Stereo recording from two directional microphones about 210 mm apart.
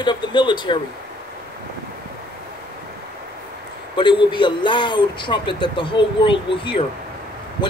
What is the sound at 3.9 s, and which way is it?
A man's voice, 25° left (ahead or behind).